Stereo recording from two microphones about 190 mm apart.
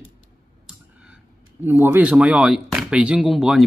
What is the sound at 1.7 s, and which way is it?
Speech, 10° right (ahead or behind).